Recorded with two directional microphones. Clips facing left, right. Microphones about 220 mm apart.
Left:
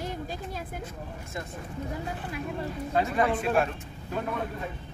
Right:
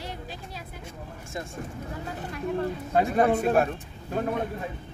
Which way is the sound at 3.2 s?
45° right (ahead or behind).